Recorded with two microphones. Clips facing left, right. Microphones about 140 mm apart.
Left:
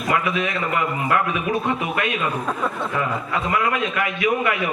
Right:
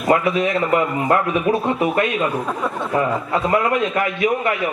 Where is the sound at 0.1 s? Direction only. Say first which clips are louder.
Right 6 dB; 35° right (ahead or behind).